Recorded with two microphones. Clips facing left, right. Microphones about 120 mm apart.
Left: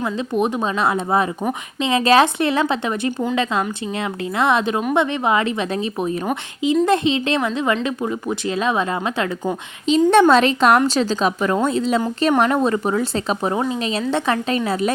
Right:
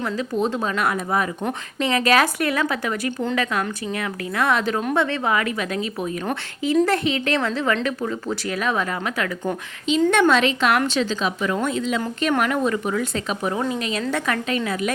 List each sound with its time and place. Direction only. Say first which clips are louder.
0.0 s speech: left 3 dB; 15° left (ahead or behind)
10.1 s a woman's voice: left 6 dB; 35° left (ahead or behind)